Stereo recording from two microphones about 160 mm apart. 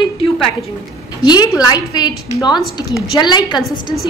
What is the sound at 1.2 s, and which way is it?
A woman's voice, 25° left (ahead or behind).